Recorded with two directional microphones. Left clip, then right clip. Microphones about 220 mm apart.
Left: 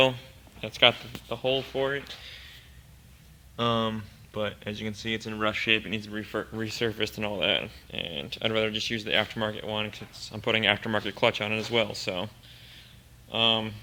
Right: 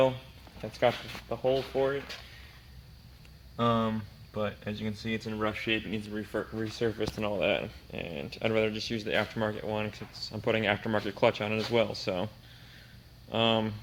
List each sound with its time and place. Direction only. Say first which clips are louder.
0.7 s speech: left 6 dB; 20° left (ahead or behind)
3.6 s speech: left 1 dB; 15° left (ahead or behind); by 12.3 s 5° right (ahead or behind)
13.3 s speech: left 3 dB; 15° right (ahead or behind)